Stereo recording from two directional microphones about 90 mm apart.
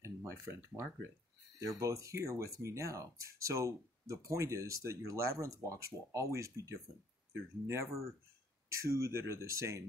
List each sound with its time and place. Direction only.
0.0 s speech: 30° right (ahead or behind)